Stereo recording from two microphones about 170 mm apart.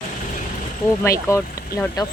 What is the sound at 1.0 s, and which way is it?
Speech, 15° left (ahead or behind).